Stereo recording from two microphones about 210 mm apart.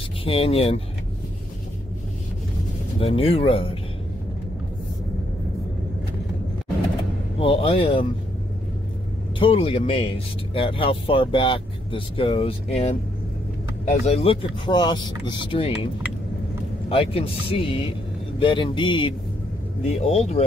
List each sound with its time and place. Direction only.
0.2 s speech: 25° left (ahead or behind)
3.0 s speech: 25° left (ahead or behind)
7.3 s speech: 25° left (ahead or behind)
9.4 s speech: 25° left (ahead or behind)
14.0 s speech: 30° left (ahead or behind)
16.9 s speech: 25° left (ahead or behind)